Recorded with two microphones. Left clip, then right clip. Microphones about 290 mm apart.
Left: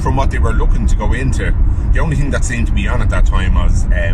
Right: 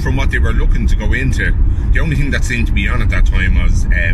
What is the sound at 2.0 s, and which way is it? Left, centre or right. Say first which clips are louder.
Speech: even; left.